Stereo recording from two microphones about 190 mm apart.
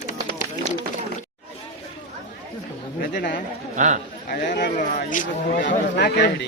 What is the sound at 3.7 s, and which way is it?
Speech, 40° right (ahead or behind).